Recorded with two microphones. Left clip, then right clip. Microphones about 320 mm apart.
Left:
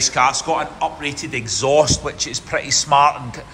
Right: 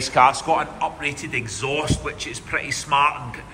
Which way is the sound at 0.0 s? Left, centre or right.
Centre.